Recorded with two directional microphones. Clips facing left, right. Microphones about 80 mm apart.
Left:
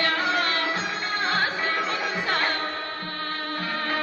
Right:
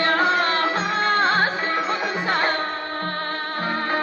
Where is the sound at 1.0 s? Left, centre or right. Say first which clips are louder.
Right 10 dB; right.